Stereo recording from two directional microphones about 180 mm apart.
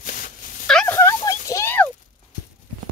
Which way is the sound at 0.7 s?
10° left (ahead or behind).